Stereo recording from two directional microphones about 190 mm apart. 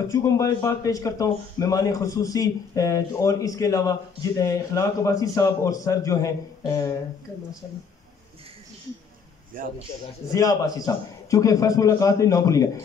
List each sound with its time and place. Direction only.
0.1 s a man's voice: 15° left (ahead or behind)
10.3 s a man's voice: 20° left (ahead or behind)